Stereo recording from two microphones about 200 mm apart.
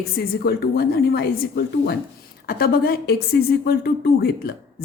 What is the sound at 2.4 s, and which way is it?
A woman's voice, 50° left (ahead or behind).